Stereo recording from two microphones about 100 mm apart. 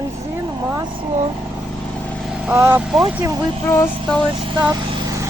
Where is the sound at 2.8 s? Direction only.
5° right (ahead or behind).